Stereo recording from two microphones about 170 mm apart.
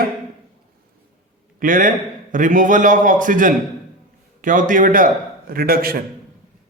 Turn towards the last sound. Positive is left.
turn(degrees=-60)  # may be behind; listen again after turning